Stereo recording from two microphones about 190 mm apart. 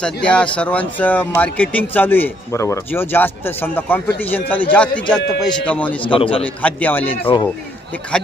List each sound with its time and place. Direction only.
0.0 s speech: 5° left (ahead or behind)
6.0 s a man's voice: 25° left (ahead or behind)
6.4 s speech: 5° left (ahead or behind)
7.3 s a man's voice: 30° left (ahead or behind)
8.1 s speech: 5° left (ahead or behind)